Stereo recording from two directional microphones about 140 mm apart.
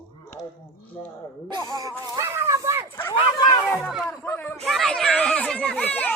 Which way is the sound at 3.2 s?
30° left (ahead or behind).